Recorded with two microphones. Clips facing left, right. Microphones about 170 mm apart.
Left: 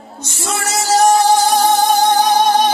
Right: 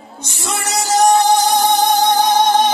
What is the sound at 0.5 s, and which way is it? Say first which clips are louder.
Music: left 1 dB; 20° right (ahead or behind).